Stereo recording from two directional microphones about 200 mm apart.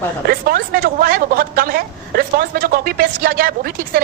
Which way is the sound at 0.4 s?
50° right (ahead or behind).